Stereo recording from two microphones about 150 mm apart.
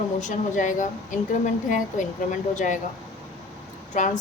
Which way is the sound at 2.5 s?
55° left (ahead or behind).